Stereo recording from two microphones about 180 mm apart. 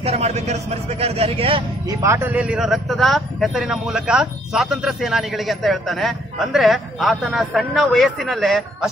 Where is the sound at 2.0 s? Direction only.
15° right (ahead or behind).